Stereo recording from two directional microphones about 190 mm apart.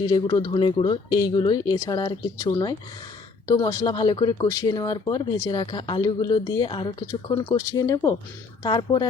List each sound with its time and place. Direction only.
0.1 s speech: 25° left (ahead or behind)